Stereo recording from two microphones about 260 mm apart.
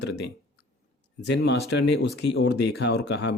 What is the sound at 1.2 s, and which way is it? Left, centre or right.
Speech, left.